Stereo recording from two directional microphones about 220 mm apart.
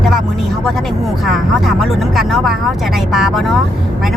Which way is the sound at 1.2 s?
Centre (ahead or behind).